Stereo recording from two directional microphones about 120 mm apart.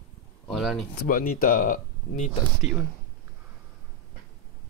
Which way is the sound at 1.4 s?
90° left.